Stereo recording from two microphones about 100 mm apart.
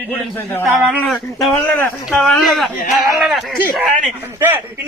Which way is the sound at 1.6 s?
20° left (ahead or behind).